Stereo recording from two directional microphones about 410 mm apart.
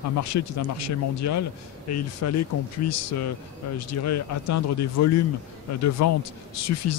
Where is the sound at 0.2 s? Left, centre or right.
Left.